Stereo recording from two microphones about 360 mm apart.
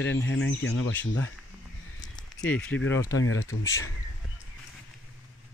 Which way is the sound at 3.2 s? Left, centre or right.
Left.